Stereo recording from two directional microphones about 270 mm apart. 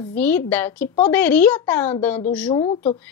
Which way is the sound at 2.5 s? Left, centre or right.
Centre.